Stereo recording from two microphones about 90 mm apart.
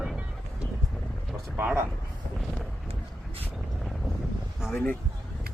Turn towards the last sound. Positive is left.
turn(degrees=-10)  # may be behind; listen again after turning